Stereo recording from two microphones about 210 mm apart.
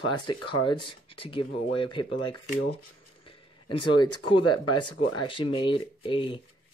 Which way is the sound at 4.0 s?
90° left.